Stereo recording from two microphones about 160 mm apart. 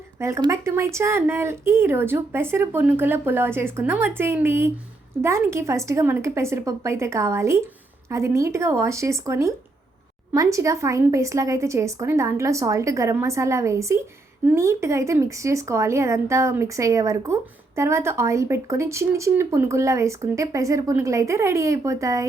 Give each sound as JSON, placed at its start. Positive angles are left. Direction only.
{"t": 0.2, "sound": "speech", "side_deg": -20}